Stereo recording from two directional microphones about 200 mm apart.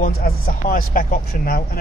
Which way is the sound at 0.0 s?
45° left (ahead or behind).